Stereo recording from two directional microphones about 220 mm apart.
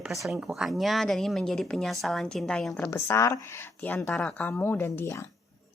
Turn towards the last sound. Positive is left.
turn(degrees=10)  # may be behind; listen again after turning